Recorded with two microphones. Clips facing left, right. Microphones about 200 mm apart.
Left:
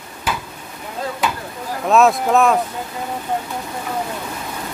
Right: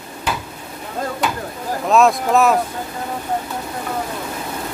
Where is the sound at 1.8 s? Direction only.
Centre (ahead or behind).